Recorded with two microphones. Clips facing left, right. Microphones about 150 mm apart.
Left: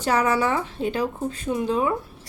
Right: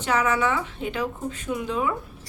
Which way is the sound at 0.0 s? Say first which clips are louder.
Left 2 dB; 35° left (ahead or behind).